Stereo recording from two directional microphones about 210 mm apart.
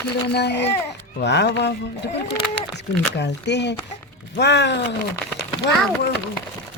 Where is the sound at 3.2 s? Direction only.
55° left (ahead or behind).